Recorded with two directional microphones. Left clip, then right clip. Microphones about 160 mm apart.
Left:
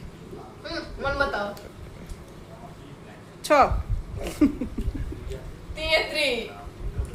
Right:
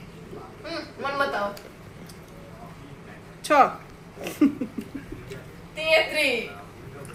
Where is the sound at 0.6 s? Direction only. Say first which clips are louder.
Left 2 dB; 65° right (ahead or behind).